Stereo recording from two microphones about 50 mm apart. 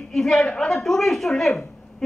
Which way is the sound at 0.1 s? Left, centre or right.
Centre.